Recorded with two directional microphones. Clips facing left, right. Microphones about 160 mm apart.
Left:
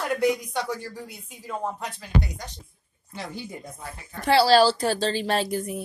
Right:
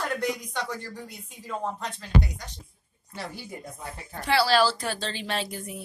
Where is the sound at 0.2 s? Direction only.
10° left (ahead or behind).